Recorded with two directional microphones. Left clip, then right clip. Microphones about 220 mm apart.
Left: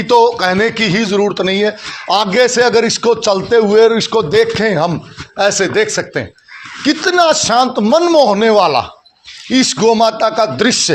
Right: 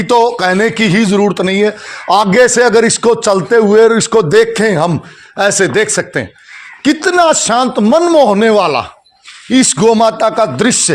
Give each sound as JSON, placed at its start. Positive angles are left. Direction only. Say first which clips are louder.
{"t": 0.0, "sound": "speech", "louder": "even", "side_deg": -35}